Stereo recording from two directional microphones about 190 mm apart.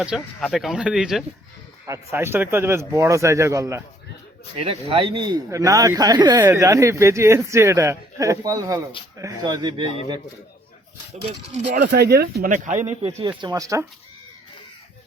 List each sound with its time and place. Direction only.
0.0 s speech: centre (ahead or behind)
1.9 s speech: 15° right (ahead or behind)
4.6 s speech: 30° right (ahead or behind)
11.1 s speech: 35° right (ahead or behind)
11.8 s speech: 55° right (ahead or behind)
12.5 s speech: 40° right (ahead or behind); by 13.8 s 15° right (ahead or behind)